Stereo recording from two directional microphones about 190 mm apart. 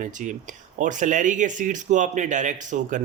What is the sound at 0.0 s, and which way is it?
Speech, 40° right (ahead or behind).